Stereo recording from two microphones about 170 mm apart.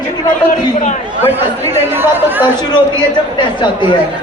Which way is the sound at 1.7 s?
10° right (ahead or behind).